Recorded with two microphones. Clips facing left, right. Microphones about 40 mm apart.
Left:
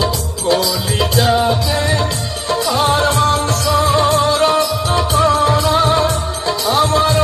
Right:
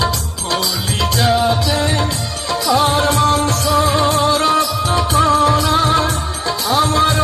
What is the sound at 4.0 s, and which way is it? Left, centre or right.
Music, left.